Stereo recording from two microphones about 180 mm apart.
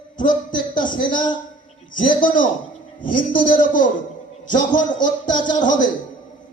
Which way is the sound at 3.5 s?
50° left (ahead or behind).